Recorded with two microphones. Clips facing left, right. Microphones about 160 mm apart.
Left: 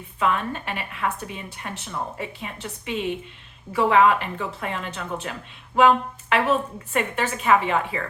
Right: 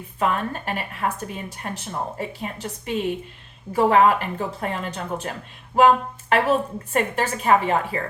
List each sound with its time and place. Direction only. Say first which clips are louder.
0.2 s a woman's voice: even; 40° right (ahead or behind)